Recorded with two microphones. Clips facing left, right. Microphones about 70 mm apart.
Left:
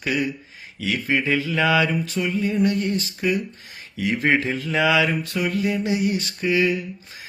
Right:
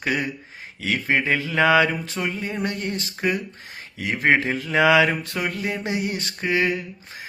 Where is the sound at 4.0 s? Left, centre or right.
Right.